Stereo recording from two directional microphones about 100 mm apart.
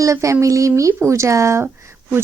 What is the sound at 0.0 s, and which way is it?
A woman's voice, 30° right (ahead or behind).